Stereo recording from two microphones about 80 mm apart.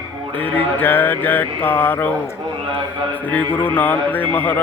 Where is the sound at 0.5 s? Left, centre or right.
Left.